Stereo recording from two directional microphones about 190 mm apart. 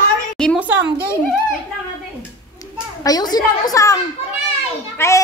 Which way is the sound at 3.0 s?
20° left (ahead or behind).